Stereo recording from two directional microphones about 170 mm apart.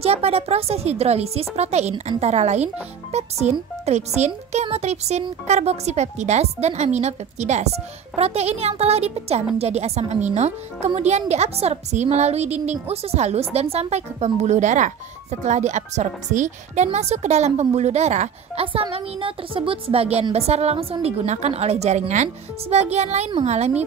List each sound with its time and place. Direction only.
0.0 s a woman's voice: 35° right (ahead or behind)